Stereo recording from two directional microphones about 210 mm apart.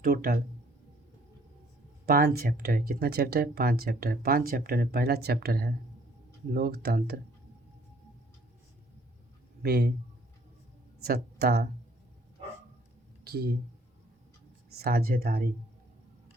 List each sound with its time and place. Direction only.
0.0 s speech: 45° right (ahead or behind)
2.0 s speech: 45° right (ahead or behind)
9.6 s speech: 50° right (ahead or behind)
11.0 s speech: 50° right (ahead or behind)
13.2 s speech: 50° right (ahead or behind)
14.7 s speech: 45° right (ahead or behind)